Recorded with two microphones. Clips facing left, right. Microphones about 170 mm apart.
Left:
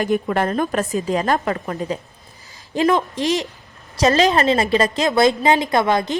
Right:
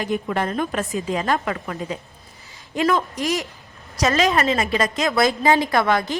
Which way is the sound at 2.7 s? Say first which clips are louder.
Left 3 dB; 25° left (ahead or behind).